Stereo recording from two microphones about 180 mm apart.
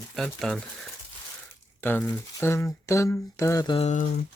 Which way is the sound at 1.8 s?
10° left (ahead or behind).